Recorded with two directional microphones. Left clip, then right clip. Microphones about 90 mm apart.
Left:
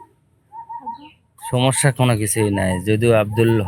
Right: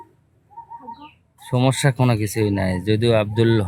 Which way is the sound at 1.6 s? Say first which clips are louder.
Left 2 dB; 25° right (ahead or behind).